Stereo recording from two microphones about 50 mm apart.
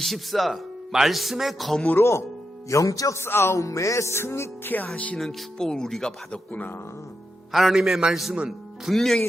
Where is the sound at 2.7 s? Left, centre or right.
Left.